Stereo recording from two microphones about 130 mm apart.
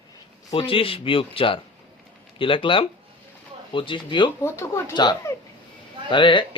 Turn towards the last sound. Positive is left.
turn(degrees=40)  # may be behind; listen again after turning